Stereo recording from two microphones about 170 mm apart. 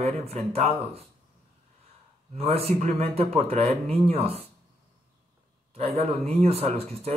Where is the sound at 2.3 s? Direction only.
35° right (ahead or behind).